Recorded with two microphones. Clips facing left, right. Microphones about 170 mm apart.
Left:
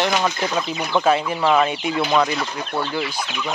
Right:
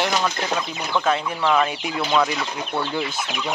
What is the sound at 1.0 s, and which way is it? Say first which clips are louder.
Speech: left 3 dB; 10° left (ahead or behind).